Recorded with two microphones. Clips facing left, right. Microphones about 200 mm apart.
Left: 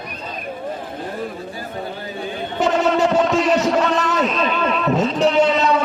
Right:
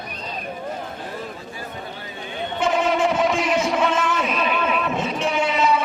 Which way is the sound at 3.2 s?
10° right (ahead or behind).